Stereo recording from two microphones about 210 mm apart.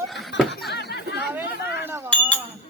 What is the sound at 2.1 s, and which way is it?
Chink, 5° left (ahead or behind).